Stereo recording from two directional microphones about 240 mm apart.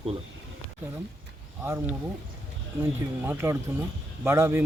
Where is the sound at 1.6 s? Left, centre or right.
Centre.